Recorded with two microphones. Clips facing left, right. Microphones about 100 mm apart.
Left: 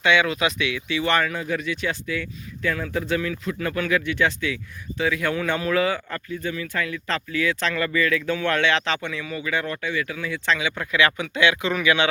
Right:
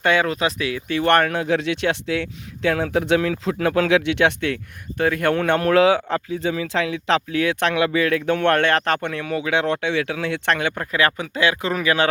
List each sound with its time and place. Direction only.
0.0 s speech: 40° right (ahead or behind); by 10.8 s 55° right (ahead or behind)
10.8 s speech: 40° right (ahead or behind)